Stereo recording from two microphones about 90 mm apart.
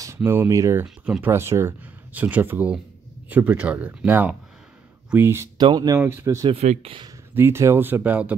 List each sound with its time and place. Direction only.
0.0 s a sound: 30° right (ahead or behind)
0.5 s speech: 35° right (ahead or behind)
1.8 s speech: 20° right (ahead or behind)
5.6 s speech: 50° right (ahead or behind)
5.9 s speech: 25° right (ahead or behind)
6.5 s speech: 85° right
7.3 s speech: 30° right (ahead or behind)